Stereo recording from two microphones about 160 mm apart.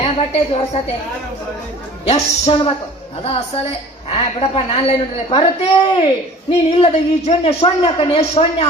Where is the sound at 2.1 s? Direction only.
40° left (ahead or behind).